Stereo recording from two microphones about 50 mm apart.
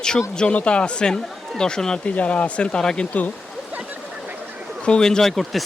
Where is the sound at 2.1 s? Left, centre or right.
Left.